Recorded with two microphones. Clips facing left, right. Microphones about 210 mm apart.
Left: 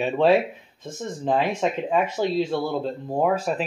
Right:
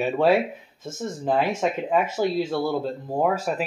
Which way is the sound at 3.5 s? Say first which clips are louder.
Left 1 dB; 5° right (ahead or behind).